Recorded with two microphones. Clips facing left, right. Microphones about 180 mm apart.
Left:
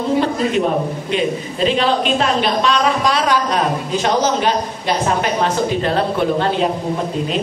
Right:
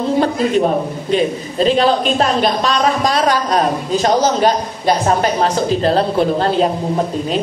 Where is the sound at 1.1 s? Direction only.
40° right (ahead or behind).